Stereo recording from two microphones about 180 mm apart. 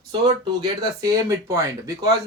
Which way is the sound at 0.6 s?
20° right (ahead or behind).